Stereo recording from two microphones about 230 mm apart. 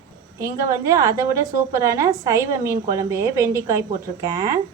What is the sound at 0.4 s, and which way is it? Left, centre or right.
A woman's voice, centre.